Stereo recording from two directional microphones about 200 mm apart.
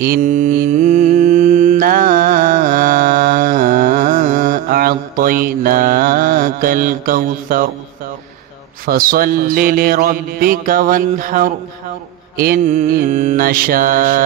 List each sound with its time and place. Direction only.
0.0 s mantra: 40° right (ahead or behind)
8.8 s mantra: 45° right (ahead or behind)